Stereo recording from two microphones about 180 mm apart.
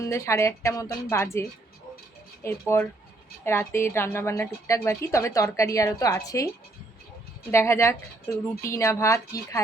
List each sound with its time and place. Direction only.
0.0 s a woman's voice: 15° left (ahead or behind)
7.5 s a woman's voice: 15° left (ahead or behind)